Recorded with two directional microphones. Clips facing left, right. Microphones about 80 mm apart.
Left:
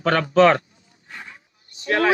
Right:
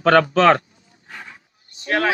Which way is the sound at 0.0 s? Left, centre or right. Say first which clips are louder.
Right 2 dB; right.